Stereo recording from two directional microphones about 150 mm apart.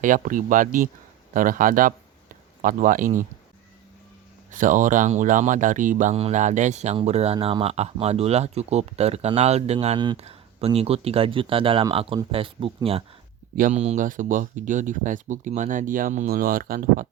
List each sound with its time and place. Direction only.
0.0 s speech: 60° right (ahead or behind)
4.5 s speech: 60° right (ahead or behind)
6.1 s speech: 50° right (ahead or behind)
13.6 s speech: 55° right (ahead or behind); by 17.1 s 70° right (ahead or behind)